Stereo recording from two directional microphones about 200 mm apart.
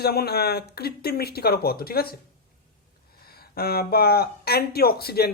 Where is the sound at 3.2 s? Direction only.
50° left (ahead or behind).